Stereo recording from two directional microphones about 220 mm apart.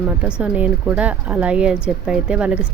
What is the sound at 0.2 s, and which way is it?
Speech, 5° right (ahead or behind).